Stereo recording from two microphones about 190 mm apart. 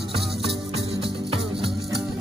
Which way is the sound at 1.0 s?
30° right (ahead or behind).